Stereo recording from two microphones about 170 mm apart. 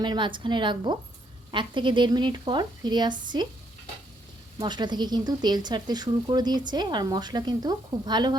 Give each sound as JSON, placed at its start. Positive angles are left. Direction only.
{"t": 0.0, "sound": "speech", "side_deg": -25}
{"t": 4.5, "sound": "speech", "side_deg": -25}